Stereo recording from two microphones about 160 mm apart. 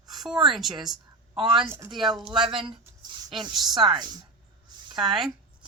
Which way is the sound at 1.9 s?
Centre (ahead or behind).